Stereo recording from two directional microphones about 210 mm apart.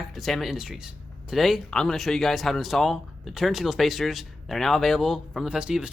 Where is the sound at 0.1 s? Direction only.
Centre (ahead or behind).